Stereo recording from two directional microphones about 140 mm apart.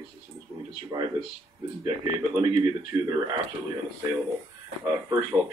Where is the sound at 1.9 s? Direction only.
35° right (ahead or behind).